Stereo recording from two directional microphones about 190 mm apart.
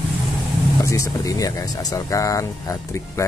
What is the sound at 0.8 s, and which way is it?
Speech, 15° left (ahead or behind).